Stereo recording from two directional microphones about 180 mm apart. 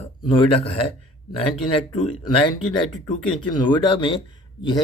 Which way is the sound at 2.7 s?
25° left (ahead or behind).